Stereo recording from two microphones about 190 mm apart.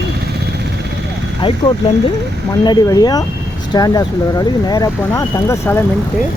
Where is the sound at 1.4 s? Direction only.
25° left (ahead or behind).